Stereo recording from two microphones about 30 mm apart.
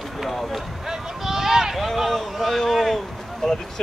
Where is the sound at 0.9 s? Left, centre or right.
Centre.